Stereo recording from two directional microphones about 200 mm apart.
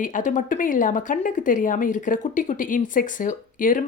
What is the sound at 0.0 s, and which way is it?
Speech, 40° left (ahead or behind).